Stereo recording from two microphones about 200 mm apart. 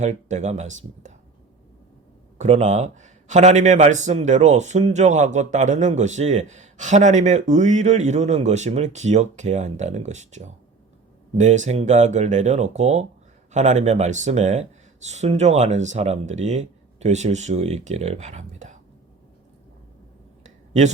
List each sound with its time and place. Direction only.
0.0 s a man's voice: 35° right (ahead or behind)
2.4 s a man's voice: 35° right (ahead or behind)
20.4 s a sound: 35° right (ahead or behind)